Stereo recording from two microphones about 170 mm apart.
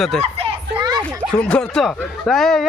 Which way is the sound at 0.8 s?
25° right (ahead or behind).